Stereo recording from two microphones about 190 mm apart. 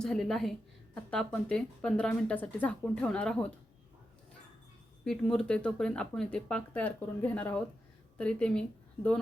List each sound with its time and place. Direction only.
0.0 s speech: centre (ahead or behind)
5.0 s speech: 5° left (ahead or behind)